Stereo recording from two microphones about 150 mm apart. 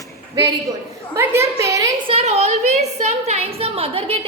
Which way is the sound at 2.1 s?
45° right (ahead or behind).